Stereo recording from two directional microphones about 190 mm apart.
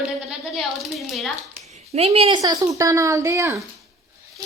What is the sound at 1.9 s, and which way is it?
Speech, 35° right (ahead or behind).